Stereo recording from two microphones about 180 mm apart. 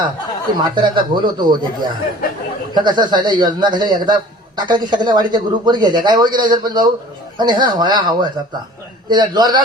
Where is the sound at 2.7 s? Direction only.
25° right (ahead or behind).